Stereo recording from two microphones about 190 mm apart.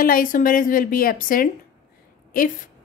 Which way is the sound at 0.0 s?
50° left (ahead or behind).